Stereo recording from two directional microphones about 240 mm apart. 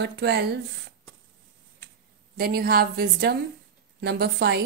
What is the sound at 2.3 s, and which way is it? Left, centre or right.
A woman's voice, right.